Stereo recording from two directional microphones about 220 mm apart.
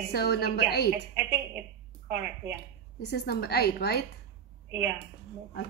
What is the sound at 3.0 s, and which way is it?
A woman's voice, 50° left (ahead or behind).